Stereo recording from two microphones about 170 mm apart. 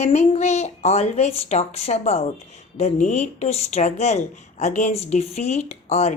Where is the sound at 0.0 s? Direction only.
40° left (ahead or behind).